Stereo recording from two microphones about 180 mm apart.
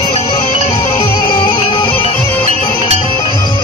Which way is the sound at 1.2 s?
25° left (ahead or behind).